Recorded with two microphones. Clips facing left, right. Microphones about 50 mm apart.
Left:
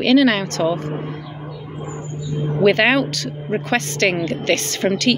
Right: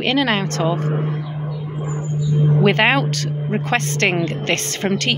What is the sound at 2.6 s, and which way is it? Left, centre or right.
Speech, right.